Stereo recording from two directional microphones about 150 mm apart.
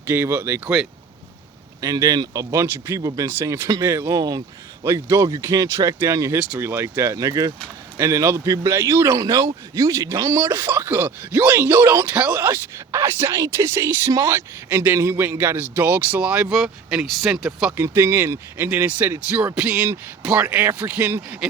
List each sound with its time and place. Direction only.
0.1 s speech: 15° right (ahead or behind)
1.8 s speech: 25° right (ahead or behind); by 17.7 s 5° right (ahead or behind)
17.7 s speech: 15° right (ahead or behind)